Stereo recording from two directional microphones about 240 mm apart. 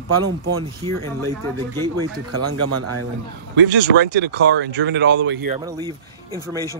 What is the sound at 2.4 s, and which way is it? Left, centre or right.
Speech, right.